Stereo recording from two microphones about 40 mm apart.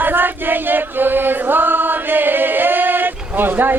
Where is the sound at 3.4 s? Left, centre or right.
Right.